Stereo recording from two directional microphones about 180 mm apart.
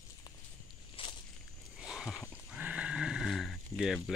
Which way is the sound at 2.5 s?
10° right (ahead or behind).